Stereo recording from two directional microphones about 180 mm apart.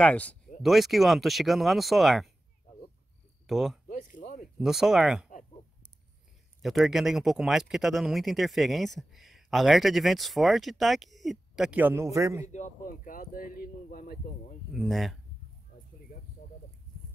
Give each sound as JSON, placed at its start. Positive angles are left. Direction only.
{"t": 0.0, "sound": "speech", "side_deg": 5}
{"t": 3.4, "sound": "speech", "side_deg": 0}
{"t": 3.9, "sound": "a sound", "side_deg": 45}
{"t": 4.6, "sound": "speech", "side_deg": 0}
{"t": 6.6, "sound": "speech", "side_deg": 0}
{"t": 12.5, "sound": "speech", "side_deg": 45}
{"t": 14.7, "sound": "speech", "side_deg": 0}